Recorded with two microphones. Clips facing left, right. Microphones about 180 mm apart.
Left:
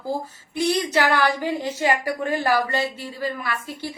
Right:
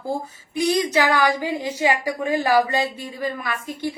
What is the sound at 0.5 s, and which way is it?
A woman's voice, 15° right (ahead or behind).